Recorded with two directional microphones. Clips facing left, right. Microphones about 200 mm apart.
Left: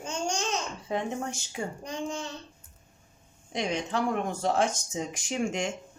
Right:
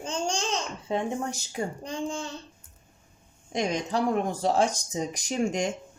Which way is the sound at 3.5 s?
45° right (ahead or behind).